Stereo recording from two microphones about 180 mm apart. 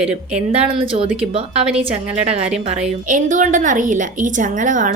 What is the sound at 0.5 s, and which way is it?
A woman's voice, 30° right (ahead or behind).